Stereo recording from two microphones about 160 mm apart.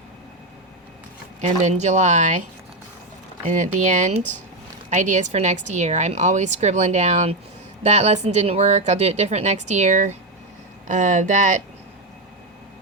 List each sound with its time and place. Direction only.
1.4 s a woman's voice: 50° right (ahead or behind)
3.5 s a woman's voice: 50° right (ahead or behind)